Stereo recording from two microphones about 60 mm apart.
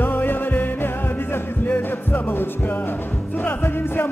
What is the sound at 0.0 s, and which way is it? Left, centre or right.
Music, left.